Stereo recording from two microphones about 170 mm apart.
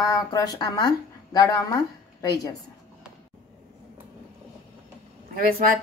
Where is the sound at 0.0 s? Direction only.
20° left (ahead or behind).